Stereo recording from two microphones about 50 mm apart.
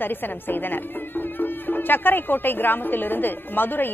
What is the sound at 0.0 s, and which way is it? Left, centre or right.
A woman's voice, left.